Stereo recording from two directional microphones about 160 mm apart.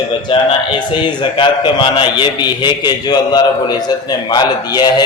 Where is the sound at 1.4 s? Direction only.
30° left (ahead or behind).